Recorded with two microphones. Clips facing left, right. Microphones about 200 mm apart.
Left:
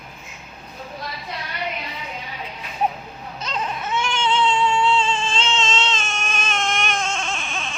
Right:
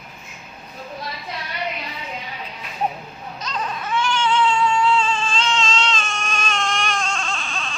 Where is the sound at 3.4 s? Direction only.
25° left (ahead or behind).